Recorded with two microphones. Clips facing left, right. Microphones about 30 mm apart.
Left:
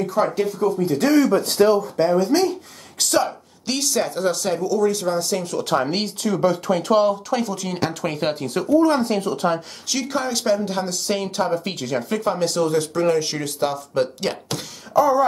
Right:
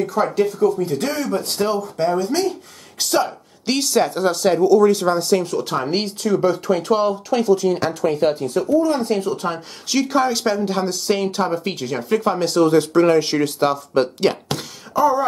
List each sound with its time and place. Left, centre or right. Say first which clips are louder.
0.0 s speech: right 2 dB; centre
3.6 s speech: right 4 dB; centre
5.4 s speech: even; centre
7.6 s speech: right 5 dB; centre
8.1 s speech: right 5 dB; centre
9.8 s speech: right 6 dB; centre
12.7 s speech: right 5 dB; right
15.0 s speech: even; centre